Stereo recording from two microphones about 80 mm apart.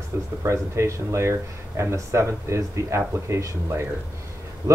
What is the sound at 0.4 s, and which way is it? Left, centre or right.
Speech, right.